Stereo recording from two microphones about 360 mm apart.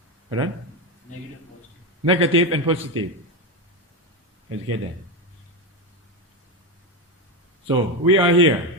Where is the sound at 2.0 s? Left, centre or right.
Centre.